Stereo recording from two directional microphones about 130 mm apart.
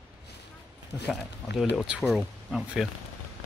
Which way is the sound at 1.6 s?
Centre (ahead or behind).